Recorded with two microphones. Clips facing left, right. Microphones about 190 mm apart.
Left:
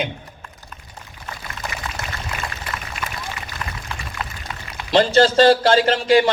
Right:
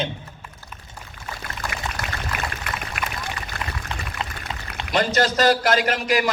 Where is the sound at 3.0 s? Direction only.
65° right (ahead or behind).